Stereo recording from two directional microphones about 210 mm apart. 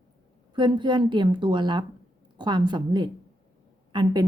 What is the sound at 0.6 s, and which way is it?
A woman's voice, 20° right (ahead or behind).